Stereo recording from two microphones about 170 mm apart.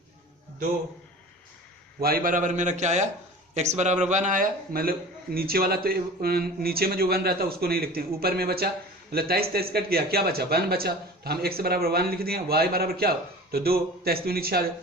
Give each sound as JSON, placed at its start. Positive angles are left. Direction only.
{"t": 2.0, "sound": "a man's voice", "side_deg": -60}